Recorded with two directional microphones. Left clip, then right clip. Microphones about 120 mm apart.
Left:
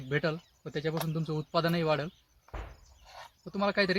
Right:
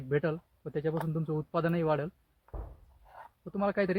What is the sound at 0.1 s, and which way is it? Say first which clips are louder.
Speech: even; 35° right (ahead or behind).